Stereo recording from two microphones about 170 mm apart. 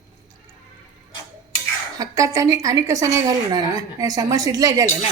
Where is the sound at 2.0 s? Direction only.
20° right (ahead or behind).